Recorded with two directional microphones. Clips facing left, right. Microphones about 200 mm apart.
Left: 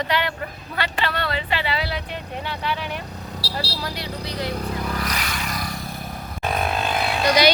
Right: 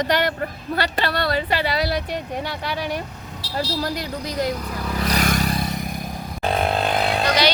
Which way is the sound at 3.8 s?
45° right (ahead or behind).